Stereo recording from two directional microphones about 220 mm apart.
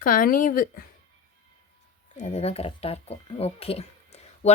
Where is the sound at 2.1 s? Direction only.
30° left (ahead or behind).